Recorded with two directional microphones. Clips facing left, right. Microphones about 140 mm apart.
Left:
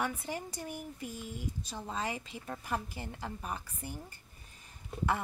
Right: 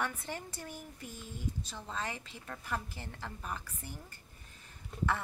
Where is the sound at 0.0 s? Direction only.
10° left (ahead or behind).